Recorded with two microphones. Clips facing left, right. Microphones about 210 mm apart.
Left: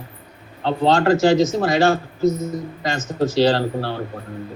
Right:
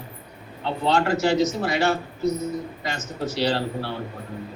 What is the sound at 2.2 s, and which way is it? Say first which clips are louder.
Speech: left 6 dB; 45° left (ahead or behind).